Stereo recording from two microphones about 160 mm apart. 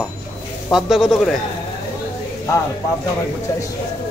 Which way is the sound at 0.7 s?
Centre (ahead or behind).